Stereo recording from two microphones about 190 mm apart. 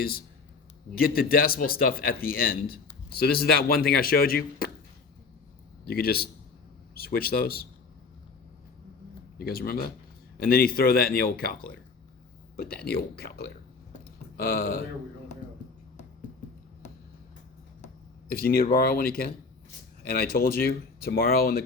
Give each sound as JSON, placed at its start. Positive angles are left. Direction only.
{"t": 0.9, "sound": "speech", "side_deg": 50}
{"t": 5.8, "sound": "a man's voice", "side_deg": 55}
{"t": 9.4, "sound": "speech", "side_deg": 55}
{"t": 18.3, "sound": "speech", "side_deg": 50}